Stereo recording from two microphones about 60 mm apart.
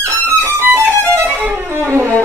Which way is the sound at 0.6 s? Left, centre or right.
Right.